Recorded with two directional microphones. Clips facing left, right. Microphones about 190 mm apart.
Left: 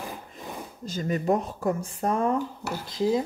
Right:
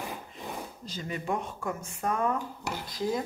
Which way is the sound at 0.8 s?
45° left (ahead or behind).